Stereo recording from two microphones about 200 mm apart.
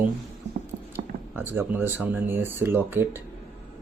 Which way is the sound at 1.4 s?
10° right (ahead or behind).